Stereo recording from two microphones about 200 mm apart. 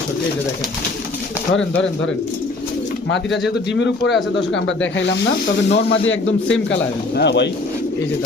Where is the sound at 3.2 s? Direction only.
Centre (ahead or behind).